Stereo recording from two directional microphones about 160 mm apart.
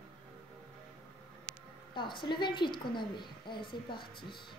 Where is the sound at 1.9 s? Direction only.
30° left (ahead or behind).